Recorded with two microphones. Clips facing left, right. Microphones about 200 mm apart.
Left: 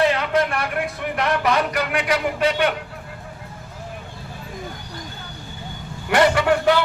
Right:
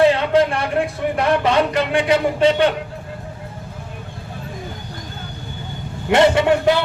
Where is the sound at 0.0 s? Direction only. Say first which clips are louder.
Right 5 dB; 30° right (ahead or behind).